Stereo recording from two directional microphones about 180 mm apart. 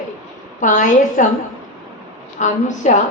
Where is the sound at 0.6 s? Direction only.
45° left (ahead or behind).